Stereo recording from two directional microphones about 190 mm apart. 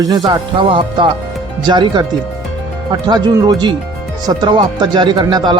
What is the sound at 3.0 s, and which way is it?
A man's voice, 20° right (ahead or behind).